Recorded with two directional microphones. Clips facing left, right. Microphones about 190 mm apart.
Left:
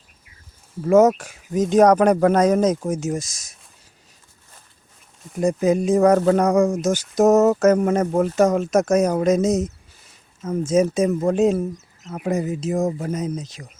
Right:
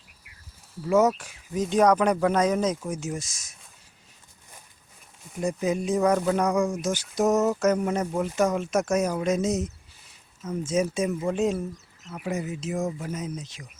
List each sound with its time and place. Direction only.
0.8 s speech: 45° left (ahead or behind)
5.4 s speech: 45° left (ahead or behind)